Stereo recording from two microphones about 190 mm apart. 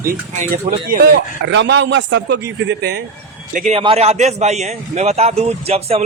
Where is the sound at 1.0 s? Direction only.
65° right (ahead or behind).